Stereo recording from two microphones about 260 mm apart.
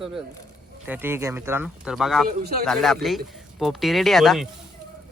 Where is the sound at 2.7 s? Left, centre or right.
Centre.